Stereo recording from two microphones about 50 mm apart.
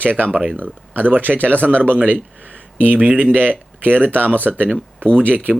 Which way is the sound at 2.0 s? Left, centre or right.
Right.